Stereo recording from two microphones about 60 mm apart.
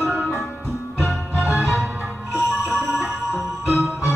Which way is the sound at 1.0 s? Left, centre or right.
Centre.